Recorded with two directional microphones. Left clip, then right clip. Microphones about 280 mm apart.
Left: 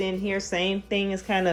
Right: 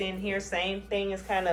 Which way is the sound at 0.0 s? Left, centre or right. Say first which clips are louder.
Left 4 dB; left.